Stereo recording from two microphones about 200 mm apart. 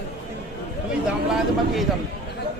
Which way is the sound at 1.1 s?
Centre (ahead or behind).